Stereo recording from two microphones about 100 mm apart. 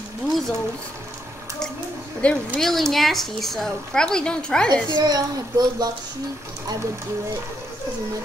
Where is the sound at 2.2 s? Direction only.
10° left (ahead or behind).